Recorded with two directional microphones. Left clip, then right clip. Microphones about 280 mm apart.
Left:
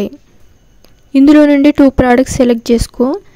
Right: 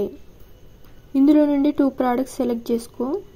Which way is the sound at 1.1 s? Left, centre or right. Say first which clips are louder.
Left 10 dB; left.